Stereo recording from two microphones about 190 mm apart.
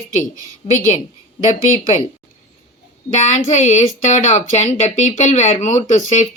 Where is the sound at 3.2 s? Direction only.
40° left (ahead or behind).